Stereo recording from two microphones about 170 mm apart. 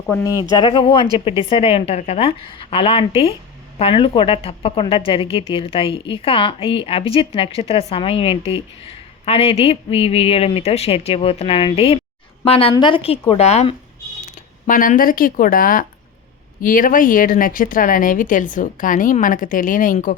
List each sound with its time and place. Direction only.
0.1 s a woman's voice: 20° left (ahead or behind); by 13.7 s 40° left (ahead or behind)
14.7 s speech: 55° left (ahead or behind)